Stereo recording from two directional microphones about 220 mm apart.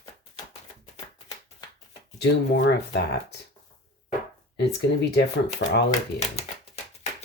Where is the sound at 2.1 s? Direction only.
50° left (ahead or behind).